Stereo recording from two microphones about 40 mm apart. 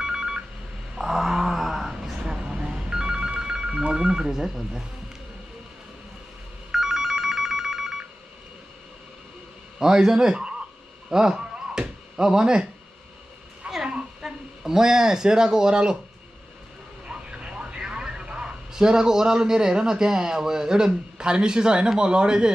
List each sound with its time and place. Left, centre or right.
0.0 s telephone dialing: centre
0.9 s a sound: centre
2.1 s telephone bell ringing: right
3.8 s telephone: centre
4.3 s a man's voice: centre
6.7 s telephone bell ringing: centre
9.8 s a man's voice: centre
11.1 s a sound: centre
13.6 s a sound: right
14.2 s speech: centre
17.1 s speech: right